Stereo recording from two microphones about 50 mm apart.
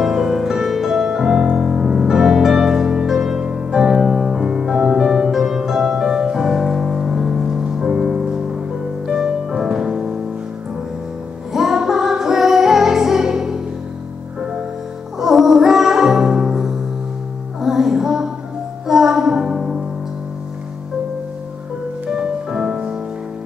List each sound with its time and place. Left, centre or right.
0.0 s music: centre
11.5 s music: centre
15.1 s music: centre
22.1 s music: centre